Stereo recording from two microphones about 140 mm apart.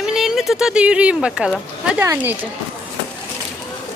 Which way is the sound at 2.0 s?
15° right (ahead or behind).